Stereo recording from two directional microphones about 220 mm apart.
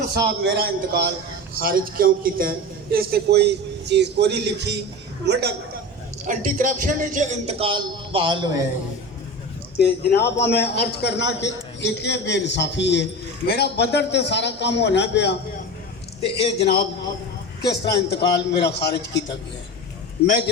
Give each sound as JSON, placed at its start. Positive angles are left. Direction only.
{"t": 0.1, "sound": "a man's voice", "side_deg": -45}
{"t": 6.2, "sound": "a man's voice", "side_deg": -35}
{"t": 9.7, "sound": "a man's voice", "side_deg": 50}
{"t": 16.2, "sound": "a man's voice", "side_deg": 25}
{"t": 17.9, "sound": "a man's voice", "side_deg": 50}